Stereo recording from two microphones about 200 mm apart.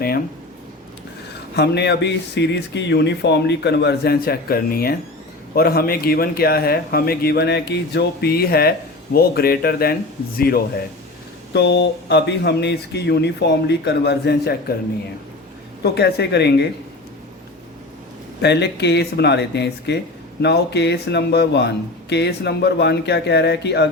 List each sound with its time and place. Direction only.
1.5 s a man's voice: 55° left (ahead or behind)
15.8 s speech: 55° left (ahead or behind)
18.4 s speech: 55° left (ahead or behind)